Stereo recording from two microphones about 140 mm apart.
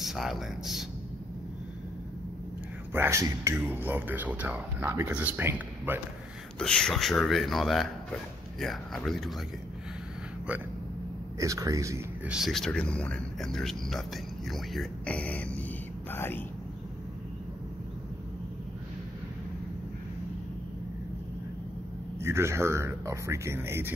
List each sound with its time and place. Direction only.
0.0 s speech: centre (ahead or behind)
2.9 s speech: 20° right (ahead or behind)
6.6 s speech: 5° left (ahead or behind)
11.3 s speech: 25° right (ahead or behind)
12.3 s speech: centre (ahead or behind); by 16.4 s 15° left (ahead or behind)
22.2 s speech: 20° right (ahead or behind)